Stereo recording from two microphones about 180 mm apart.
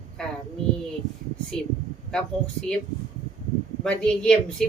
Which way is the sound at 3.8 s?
5° left (ahead or behind).